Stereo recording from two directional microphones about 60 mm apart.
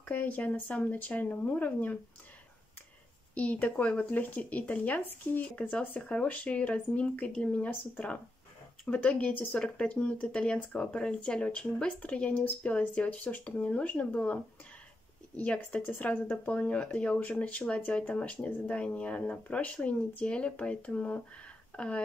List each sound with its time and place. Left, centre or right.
0.0 s speech: left
3.3 s speech: left